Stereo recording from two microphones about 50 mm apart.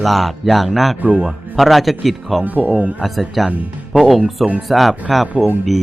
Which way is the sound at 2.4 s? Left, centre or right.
Right.